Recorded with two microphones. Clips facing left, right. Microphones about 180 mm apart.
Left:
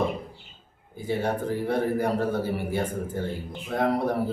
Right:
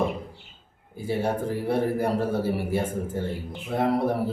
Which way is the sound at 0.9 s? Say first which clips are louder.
Right 1 dB; 5° right (ahead or behind).